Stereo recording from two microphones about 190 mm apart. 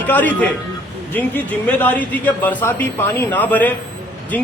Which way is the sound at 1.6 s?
10° left (ahead or behind).